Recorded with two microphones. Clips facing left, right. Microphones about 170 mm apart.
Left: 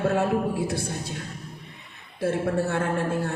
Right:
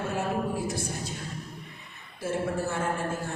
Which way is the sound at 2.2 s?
60° left (ahead or behind).